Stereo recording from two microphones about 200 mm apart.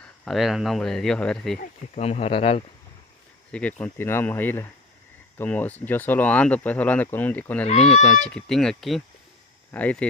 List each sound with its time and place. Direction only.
0.2 s speech: centre (ahead or behind)
1.6 s speech: 30° left (ahead or behind)
3.5 s speech: 5° left (ahead or behind)
7.6 s speech: 35° left (ahead or behind)
8.0 s speech: 5° left (ahead or behind)